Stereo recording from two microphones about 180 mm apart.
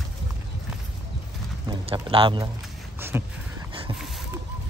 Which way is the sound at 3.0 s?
10° right (ahead or behind).